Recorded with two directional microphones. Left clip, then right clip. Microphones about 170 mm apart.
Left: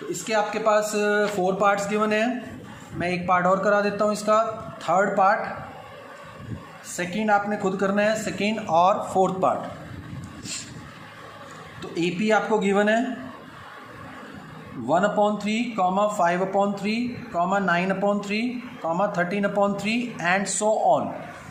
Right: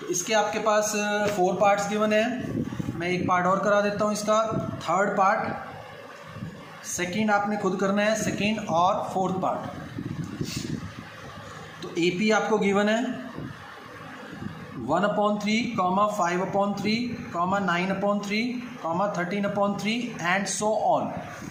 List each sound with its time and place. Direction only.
0.1 s speech: 30° left (ahead or behind)
6.9 s speech: 30° left (ahead or behind); by 9.5 s 50° left (ahead or behind)
11.8 s speech: 30° left (ahead or behind)
14.8 s speech: 35° left (ahead or behind)